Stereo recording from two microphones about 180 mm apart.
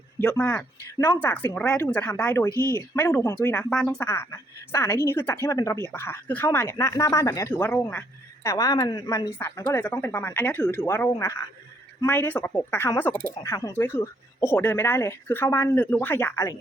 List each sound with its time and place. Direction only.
0.2 s speech: 10° left (ahead or behind)
2.5 s speech: 20° right (ahead or behind)
2.7 s speech: 15° left (ahead or behind)